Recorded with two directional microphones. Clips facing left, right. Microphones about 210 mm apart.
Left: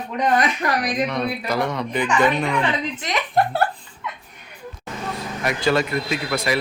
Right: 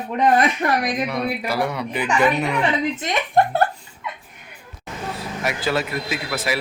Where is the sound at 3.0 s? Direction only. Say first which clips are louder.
Even; 25° right (ahead or behind).